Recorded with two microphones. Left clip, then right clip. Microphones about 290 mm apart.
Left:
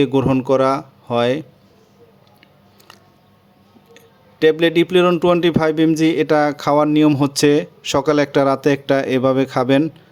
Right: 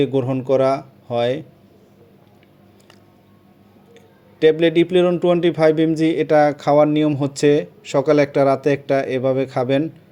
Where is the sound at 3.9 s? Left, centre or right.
Centre.